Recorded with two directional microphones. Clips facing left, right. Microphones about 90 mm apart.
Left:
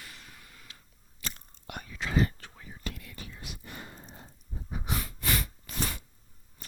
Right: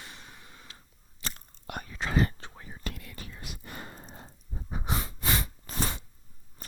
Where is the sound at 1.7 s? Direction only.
40° right (ahead or behind).